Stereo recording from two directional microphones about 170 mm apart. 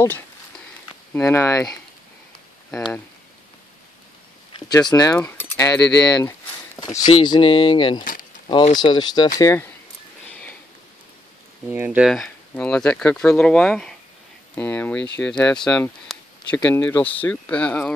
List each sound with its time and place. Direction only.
1.1 s speech: 15° left (ahead or behind)
4.6 s speech: 25° left (ahead or behind)
8.0 s a sound: 50° left (ahead or behind)
8.5 s speech: 30° left (ahead or behind)
11.7 s speech: 10° right (ahead or behind)
12.1 s speech: 5° left (ahead or behind)